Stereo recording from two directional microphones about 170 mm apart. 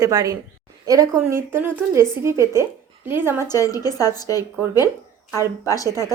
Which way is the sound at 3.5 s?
20° left (ahead or behind).